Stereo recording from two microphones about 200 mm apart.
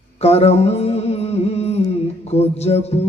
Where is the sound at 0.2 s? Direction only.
30° left (ahead or behind).